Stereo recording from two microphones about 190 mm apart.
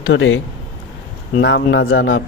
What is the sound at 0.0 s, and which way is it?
Speech, 85° left.